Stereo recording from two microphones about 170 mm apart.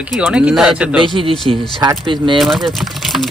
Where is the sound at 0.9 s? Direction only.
30° right (ahead or behind).